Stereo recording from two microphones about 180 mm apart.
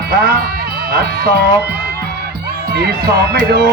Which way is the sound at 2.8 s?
60° right (ahead or behind).